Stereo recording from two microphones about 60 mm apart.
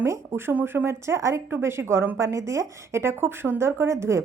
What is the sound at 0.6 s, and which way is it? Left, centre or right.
A woman's voice, right.